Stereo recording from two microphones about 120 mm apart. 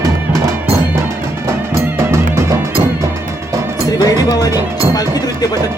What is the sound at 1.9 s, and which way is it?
Music, 20° right (ahead or behind).